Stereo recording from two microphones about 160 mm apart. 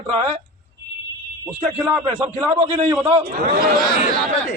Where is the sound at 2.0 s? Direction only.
25° right (ahead or behind).